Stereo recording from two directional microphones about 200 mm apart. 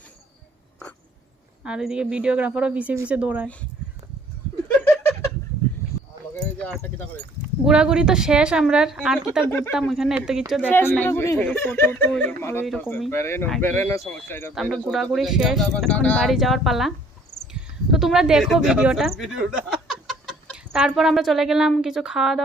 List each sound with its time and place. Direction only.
1.6 s speech: 5° right (ahead or behind)
6.7 s speech: 10° left (ahead or behind)
7.6 s speech: 5° right (ahead or behind)
9.5 s speech: 10° left (ahead or behind)
9.7 s speech: centre (ahead or behind)
10.7 s speech: 10° left (ahead or behind)
14.5 s speech: centre (ahead or behind)